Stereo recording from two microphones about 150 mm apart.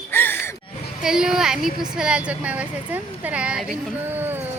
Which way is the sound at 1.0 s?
5° right (ahead or behind).